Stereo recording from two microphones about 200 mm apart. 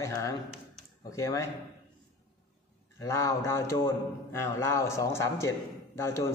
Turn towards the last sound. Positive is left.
turn(degrees=15)  # may be behind; listen again after turning